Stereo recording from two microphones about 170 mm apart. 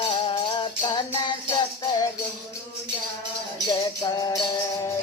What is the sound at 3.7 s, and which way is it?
Music, 20° left (ahead or behind).